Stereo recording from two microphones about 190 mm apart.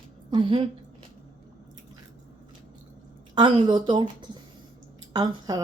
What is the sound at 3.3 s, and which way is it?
A woman's voice, 25° right (ahead or behind).